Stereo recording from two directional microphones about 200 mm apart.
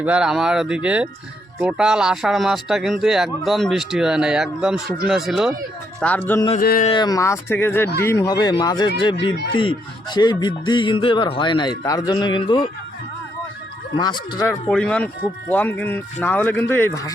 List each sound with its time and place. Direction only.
0.0 s speech: 5° right (ahead or behind)
6.6 s speech: 45° left (ahead or behind)
6.8 s speech: 25° left (ahead or behind)
13.9 s speech: 20° left (ahead or behind)
14.7 s speech: 5° left (ahead or behind)